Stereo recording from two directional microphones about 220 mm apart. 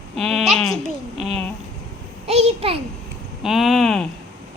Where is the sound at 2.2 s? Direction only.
30° right (ahead or behind).